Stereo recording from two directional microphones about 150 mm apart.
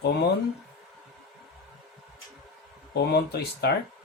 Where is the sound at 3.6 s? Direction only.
90° left.